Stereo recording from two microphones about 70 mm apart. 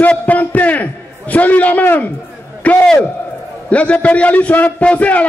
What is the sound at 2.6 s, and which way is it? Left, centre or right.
A man's voice, centre.